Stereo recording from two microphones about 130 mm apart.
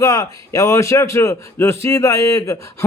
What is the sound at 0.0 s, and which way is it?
Speech, 25° left (ahead or behind).